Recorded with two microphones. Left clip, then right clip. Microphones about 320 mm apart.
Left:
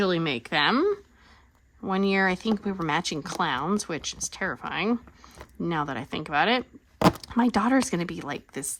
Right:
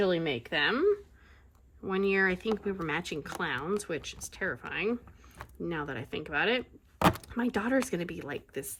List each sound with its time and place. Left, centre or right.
0.0 s speech: left